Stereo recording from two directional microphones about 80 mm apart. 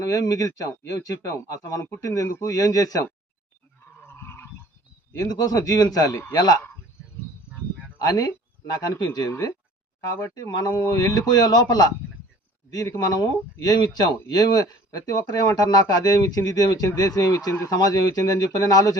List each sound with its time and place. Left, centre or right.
0.1 s speech: left
4.0 s goose: left
5.2 s speech: left
8.0 s speech: left
10.3 s speech: left
13.1 s speech: left